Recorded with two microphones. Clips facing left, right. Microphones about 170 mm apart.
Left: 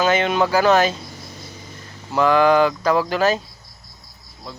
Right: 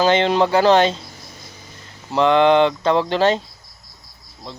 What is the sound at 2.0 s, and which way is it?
Speech, 25° right (ahead or behind).